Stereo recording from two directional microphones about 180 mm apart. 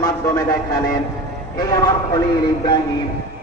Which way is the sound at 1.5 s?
20° left (ahead or behind).